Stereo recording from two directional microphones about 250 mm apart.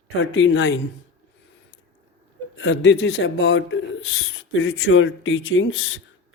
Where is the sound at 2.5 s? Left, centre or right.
Left.